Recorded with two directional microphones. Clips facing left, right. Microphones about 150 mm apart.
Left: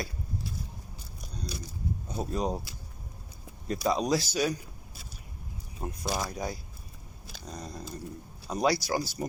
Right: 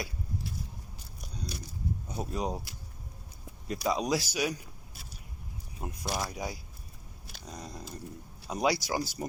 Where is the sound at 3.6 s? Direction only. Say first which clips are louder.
Left 2 dB; 10° right (ahead or behind).